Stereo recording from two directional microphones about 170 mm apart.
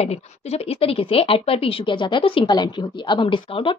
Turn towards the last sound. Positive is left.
turn(degrees=30)  # may be behind; listen again after turning